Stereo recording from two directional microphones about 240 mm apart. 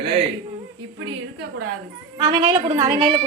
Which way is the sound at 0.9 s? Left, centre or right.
Right.